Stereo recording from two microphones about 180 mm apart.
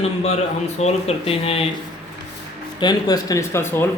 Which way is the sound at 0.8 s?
35° left (ahead or behind).